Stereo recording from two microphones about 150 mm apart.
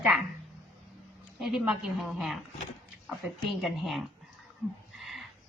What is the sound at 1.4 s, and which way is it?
A woman's voice, centre (ahead or behind).